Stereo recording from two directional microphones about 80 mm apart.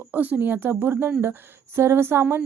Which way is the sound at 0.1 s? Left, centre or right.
Right.